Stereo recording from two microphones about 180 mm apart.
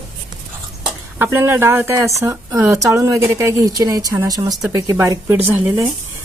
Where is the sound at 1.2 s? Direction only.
10° right (ahead or behind).